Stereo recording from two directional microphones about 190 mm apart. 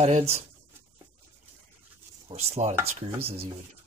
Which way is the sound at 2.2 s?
35° right (ahead or behind).